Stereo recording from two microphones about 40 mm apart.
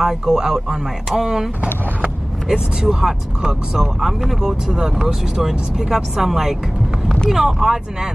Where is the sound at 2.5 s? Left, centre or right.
Centre.